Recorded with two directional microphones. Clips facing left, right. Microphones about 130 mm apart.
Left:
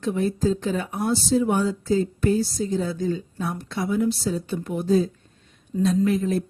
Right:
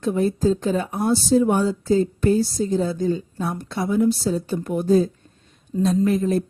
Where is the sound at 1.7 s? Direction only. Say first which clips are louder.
Right 3 dB; 35° right (ahead or behind).